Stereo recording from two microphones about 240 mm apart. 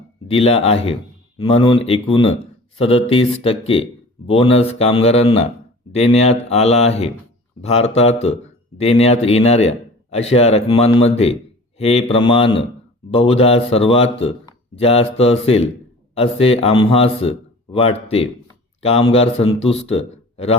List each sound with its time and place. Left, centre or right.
0.3 s a man's voice: left